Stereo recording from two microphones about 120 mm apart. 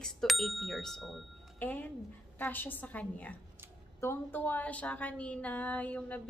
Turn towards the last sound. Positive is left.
turn(degrees=10)  # may be behind; listen again after turning